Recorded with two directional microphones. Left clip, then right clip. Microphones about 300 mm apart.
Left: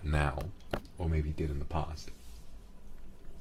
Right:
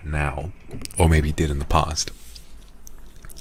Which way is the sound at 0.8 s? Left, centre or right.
Right.